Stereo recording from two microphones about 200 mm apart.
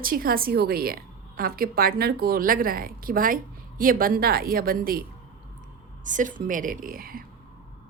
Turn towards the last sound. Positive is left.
turn(degrees=-45)  # may be behind; listen again after turning